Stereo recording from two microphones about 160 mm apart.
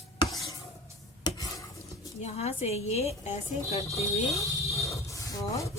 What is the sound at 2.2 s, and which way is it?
A woman's voice, 45° left (ahead or behind).